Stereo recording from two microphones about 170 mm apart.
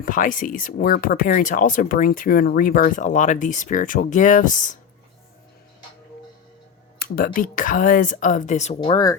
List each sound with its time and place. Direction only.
0.0 s speech: 50° left (ahead or behind)
7.0 s speech: 55° left (ahead or behind)
8.8 s speech: 25° left (ahead or behind)